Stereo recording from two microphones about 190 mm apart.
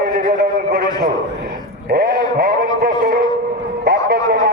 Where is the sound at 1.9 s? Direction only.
50° right (ahead or behind).